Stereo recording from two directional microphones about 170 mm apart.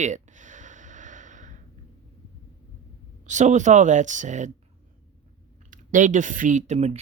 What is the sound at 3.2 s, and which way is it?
Speech, 45° right (ahead or behind).